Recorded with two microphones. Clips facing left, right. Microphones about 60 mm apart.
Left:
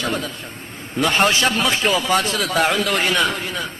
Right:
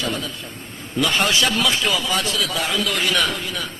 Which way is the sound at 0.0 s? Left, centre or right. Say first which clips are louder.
Left 2 dB; left.